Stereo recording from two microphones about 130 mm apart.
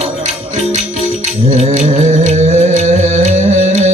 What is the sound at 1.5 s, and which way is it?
Music, 60° right (ahead or behind).